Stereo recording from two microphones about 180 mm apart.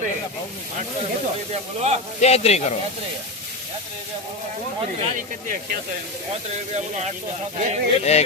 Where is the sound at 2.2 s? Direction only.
35° left (ahead or behind).